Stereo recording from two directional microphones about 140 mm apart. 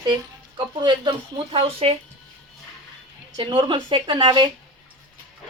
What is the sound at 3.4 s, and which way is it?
Speech, 35° right (ahead or behind).